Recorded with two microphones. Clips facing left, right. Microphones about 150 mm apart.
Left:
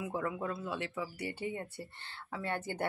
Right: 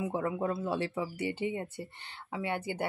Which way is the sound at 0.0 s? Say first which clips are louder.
Right 4 dB; 25° right (ahead or behind).